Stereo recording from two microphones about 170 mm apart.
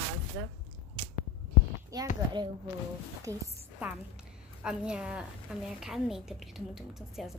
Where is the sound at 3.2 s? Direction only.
20° right (ahead or behind).